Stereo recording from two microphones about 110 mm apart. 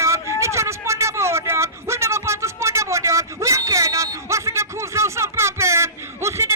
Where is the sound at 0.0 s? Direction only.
25° right (ahead or behind).